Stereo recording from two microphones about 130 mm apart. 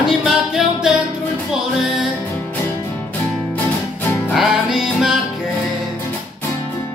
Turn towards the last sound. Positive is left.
turn(degrees=-5)  # may be behind; listen again after turning